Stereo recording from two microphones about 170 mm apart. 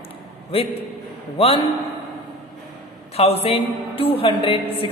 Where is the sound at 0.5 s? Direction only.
35° left (ahead or behind).